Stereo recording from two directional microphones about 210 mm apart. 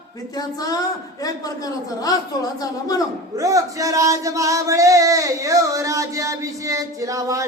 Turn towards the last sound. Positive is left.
turn(degrees=-15)  # may be behind; listen again after turning